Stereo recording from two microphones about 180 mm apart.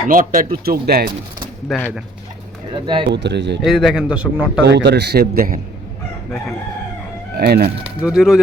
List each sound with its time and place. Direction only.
0.1 s speech: 50° right (ahead or behind)
1.6 s speech: 5° left (ahead or behind)
2.7 s speech: 25° right (ahead or behind)
3.1 s a man's voice: 75° right (ahead or behind)
3.6 s a man's voice: centre (ahead or behind)
4.6 s a man's voice: 70° right (ahead or behind)
7.3 s speech: 60° right (ahead or behind)
8.0 s a man's voice: 5° right (ahead or behind)